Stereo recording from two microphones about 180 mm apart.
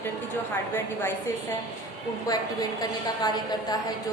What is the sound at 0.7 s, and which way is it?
Speech, 15° left (ahead or behind).